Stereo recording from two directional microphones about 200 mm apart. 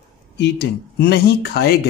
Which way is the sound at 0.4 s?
55° left (ahead or behind).